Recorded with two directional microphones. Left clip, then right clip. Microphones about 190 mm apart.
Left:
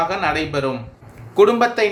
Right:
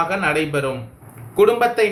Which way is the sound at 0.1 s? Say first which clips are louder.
Right 1 dB; 45° left (ahead or behind).